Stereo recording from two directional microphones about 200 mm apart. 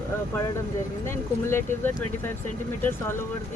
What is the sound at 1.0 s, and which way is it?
Speech, 10° left (ahead or behind).